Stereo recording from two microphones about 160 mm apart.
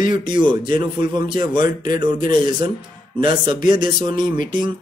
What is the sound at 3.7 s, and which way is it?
A man's voice, 30° right (ahead or behind).